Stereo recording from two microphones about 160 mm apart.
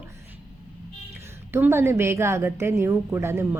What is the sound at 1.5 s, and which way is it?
A woman's voice, 15° right (ahead or behind).